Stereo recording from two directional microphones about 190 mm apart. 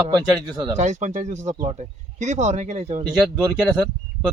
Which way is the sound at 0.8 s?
40° right (ahead or behind).